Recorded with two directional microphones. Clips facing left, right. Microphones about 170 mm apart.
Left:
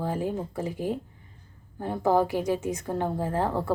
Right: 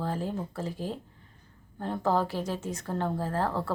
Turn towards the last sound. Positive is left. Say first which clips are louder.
# left 3 dB
turn(degrees=15)  # may be behind; listen again after turning